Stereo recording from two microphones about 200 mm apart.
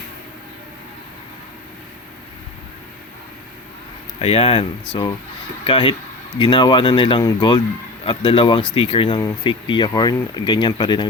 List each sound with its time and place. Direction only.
4.2 s speech: 30° left (ahead or behind)
5.6 s speech: 25° left (ahead or behind)